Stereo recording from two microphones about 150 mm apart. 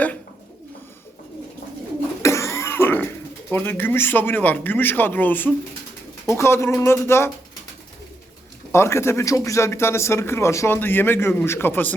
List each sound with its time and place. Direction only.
2.2 s throat clearing: 20° left (ahead or behind)
3.5 s a man's voice: 15° left (ahead or behind)
8.7 s a man's voice: 15° left (ahead or behind)